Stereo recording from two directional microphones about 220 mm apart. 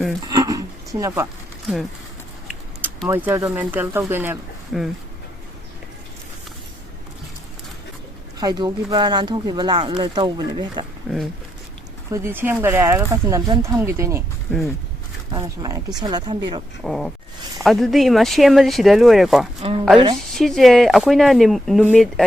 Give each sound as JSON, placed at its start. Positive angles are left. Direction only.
{"t": 0.3, "sound": "a sound", "side_deg": -15}
{"t": 2.8, "sound": "speech", "side_deg": -10}
{"t": 8.4, "sound": "speech", "side_deg": -20}
{"t": 11.1, "sound": "speech", "side_deg": 0}
{"t": 12.1, "sound": "speech", "side_deg": -10}
{"t": 15.3, "sound": "speech", "side_deg": -15}
{"t": 16.8, "sound": "speech", "side_deg": 0}